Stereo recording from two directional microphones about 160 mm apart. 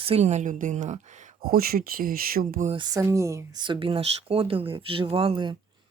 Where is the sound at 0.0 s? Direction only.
40° right (ahead or behind); by 2.6 s 60° right (ahead or behind).